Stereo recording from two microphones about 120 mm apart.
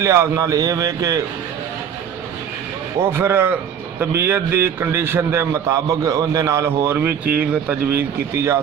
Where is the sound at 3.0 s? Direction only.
20° right (ahead or behind).